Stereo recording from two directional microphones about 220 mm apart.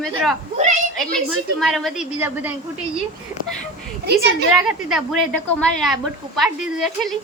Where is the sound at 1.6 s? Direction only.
Centre (ahead or behind).